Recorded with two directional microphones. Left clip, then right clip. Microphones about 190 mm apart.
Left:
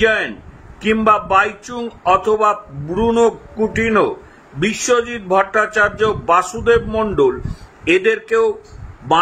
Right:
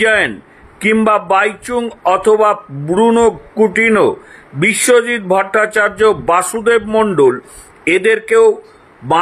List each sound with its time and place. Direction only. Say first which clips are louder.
0.0 s a man's voice: right 4 dB; 20° right (ahead or behind)